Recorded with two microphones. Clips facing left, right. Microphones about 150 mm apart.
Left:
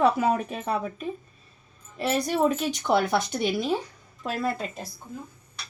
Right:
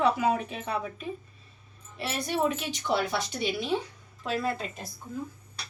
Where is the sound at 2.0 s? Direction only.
40° left (ahead or behind).